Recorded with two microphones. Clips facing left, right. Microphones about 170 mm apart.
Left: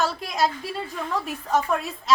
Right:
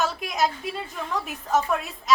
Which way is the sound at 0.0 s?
Centre (ahead or behind).